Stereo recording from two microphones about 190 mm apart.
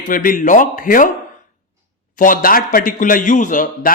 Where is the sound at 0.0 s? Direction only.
45° left (ahead or behind).